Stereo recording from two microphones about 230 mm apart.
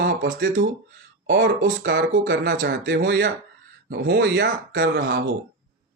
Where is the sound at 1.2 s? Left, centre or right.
Right.